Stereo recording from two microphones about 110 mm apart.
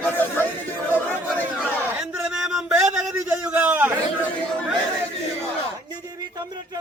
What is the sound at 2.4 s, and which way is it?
Speech, 5° right (ahead or behind).